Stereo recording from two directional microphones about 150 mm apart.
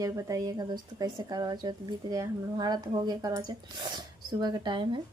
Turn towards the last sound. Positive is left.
turn(degrees=-30)  # may be behind; listen again after turning